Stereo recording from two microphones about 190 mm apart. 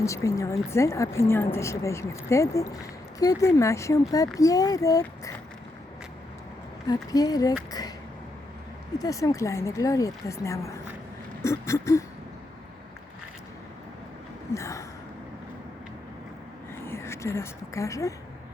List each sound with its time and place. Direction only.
0.0 s a woman's voice: 15° left (ahead or behind)
6.8 s a child's voice: 20° left (ahead or behind)
7.7 s a sound: 20° left (ahead or behind)
9.0 s a woman's voice: 20° left (ahead or behind)
14.5 s a woman's voice: 15° left (ahead or behind)
16.8 s a woman's voice: 15° left (ahead or behind)